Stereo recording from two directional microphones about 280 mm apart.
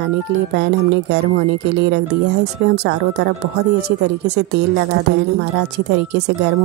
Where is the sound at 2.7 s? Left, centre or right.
Right.